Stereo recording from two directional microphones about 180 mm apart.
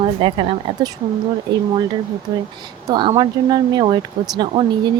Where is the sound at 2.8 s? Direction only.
20° right (ahead or behind).